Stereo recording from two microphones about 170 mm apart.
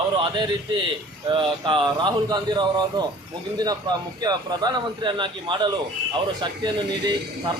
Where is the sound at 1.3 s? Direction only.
30° right (ahead or behind).